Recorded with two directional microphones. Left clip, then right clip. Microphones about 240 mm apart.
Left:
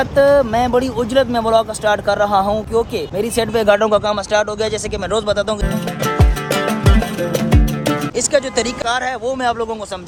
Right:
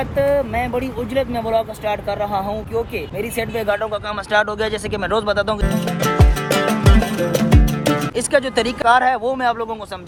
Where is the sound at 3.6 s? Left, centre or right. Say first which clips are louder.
Left 9 dB; left.